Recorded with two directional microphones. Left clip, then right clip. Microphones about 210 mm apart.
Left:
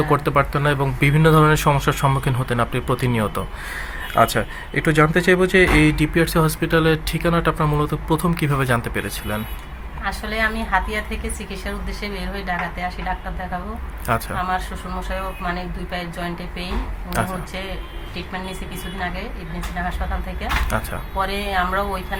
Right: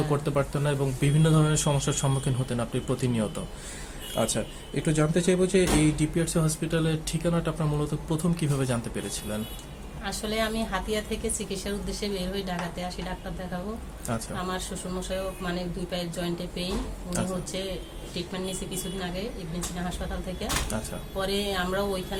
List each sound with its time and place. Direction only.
0.1 s speech: 30° left (ahead or behind)
10.0 s a woman's voice: centre (ahead or behind)
14.3 s a woman's voice: centre (ahead or behind)
17.2 s speech: 30° left (ahead or behind)
20.7 s speech: 30° left (ahead or behind)
21.2 s a woman's voice: centre (ahead or behind)